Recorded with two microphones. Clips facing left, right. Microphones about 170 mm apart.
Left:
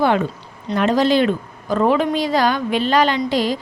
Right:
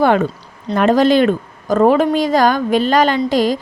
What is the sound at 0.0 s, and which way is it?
A woman's voice, 50° right (ahead or behind).